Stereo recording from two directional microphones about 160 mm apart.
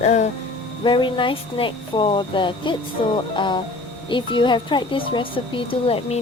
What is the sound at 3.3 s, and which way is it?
Music, 30° left (ahead or behind).